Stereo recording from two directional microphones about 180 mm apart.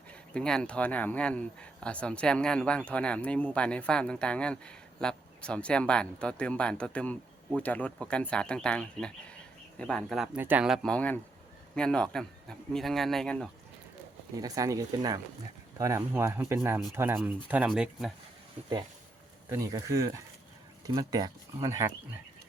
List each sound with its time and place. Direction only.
0.1 s speech: 5° left (ahead or behind)
14.4 s speech: 20° right (ahead or behind); by 18.1 s 5° right (ahead or behind)
19.5 s speech: 20° right (ahead or behind)